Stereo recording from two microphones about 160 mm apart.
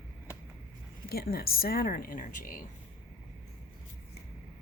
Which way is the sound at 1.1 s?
75° left (ahead or behind).